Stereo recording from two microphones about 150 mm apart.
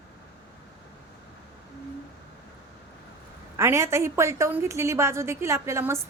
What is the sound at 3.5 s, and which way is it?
A woman's voice, 20° right (ahead or behind).